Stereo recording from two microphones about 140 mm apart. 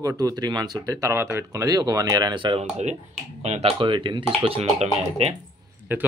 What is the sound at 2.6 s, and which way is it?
Speech, 55° right (ahead or behind).